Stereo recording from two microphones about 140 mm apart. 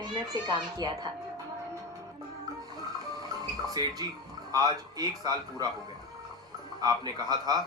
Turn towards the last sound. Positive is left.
turn(degrees=-30)  # may be behind; listen again after turning